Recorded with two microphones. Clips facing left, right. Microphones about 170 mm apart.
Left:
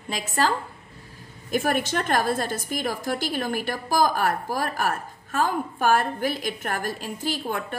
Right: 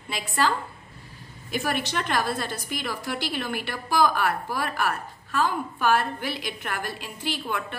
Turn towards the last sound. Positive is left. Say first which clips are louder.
# left 2 dB
turn(degrees=45)  # may be behind; listen again after turning